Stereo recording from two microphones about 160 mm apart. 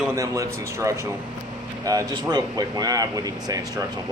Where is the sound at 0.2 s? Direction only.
20° right (ahead or behind).